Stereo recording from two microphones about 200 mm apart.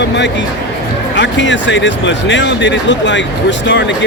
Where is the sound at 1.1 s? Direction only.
65° left (ahead or behind).